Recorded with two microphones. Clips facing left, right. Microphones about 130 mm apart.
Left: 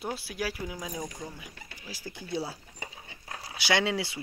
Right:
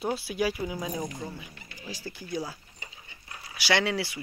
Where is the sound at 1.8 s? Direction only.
10° left (ahead or behind).